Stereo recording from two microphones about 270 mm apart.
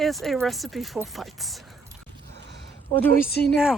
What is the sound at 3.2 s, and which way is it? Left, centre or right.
Speech, left.